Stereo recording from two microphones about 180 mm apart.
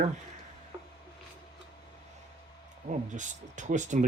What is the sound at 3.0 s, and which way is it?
Speech, 45° right (ahead or behind).